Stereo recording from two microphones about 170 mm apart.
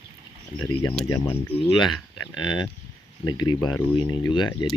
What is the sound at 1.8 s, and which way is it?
Speech, 25° left (ahead or behind).